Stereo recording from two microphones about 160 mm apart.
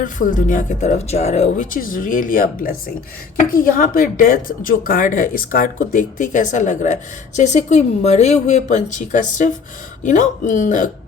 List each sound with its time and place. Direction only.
0.0 s a woman's voice: 55° left (ahead or behind)
1.7 s a woman's voice: 60° left (ahead or behind)